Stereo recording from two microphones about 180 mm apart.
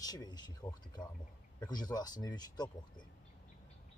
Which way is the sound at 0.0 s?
20° left (ahead or behind).